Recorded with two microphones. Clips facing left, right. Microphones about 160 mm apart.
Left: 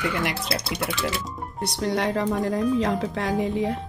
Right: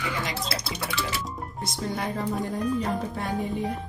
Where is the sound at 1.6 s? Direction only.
75° left (ahead or behind).